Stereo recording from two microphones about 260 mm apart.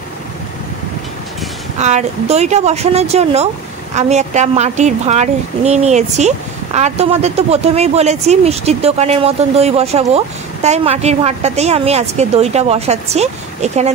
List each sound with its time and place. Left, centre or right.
1.8 s speech: right